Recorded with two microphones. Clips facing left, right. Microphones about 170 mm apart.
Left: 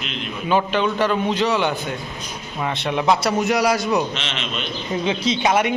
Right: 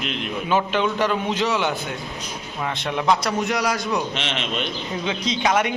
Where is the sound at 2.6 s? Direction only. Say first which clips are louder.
Left 3 dB; 10° left (ahead or behind).